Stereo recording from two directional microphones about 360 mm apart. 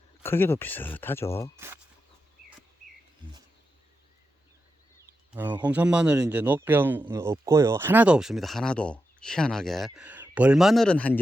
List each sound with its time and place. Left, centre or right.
0.2 s a man's voice: centre
1.5 s speech: centre
5.3 s a man's voice: centre